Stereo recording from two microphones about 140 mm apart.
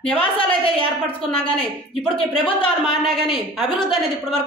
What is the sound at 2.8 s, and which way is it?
A woman's voice, centre (ahead or behind).